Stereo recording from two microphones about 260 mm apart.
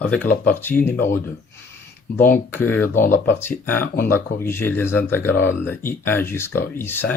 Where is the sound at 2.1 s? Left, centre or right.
Left.